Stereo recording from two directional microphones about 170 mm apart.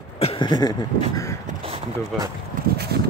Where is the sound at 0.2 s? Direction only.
30° left (ahead or behind).